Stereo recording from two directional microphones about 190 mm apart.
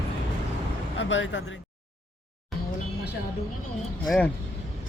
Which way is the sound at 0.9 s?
75° left (ahead or behind).